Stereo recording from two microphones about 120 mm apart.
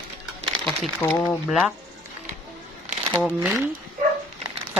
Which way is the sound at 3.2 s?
5° right (ahead or behind).